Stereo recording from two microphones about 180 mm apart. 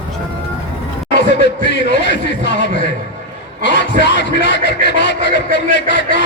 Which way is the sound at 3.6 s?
75° left (ahead or behind).